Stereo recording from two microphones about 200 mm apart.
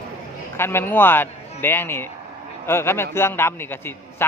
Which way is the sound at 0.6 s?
10° left (ahead or behind).